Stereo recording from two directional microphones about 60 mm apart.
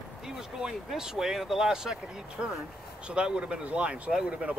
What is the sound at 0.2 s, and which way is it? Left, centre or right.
Speech, centre.